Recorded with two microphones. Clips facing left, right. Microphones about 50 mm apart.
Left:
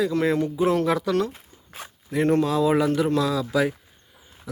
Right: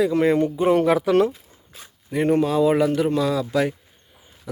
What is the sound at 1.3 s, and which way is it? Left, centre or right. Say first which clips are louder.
Zipper: left 5 dB; left.